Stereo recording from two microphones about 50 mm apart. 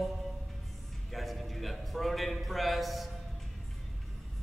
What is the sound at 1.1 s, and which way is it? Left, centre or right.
A man's voice, centre.